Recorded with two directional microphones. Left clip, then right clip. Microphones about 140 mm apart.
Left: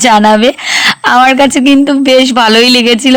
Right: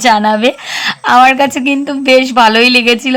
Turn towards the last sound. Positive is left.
turn(degrees=35)  # may be behind; listen again after turning